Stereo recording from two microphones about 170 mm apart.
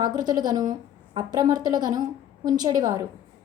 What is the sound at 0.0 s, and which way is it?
A woman's voice, 25° right (ahead or behind).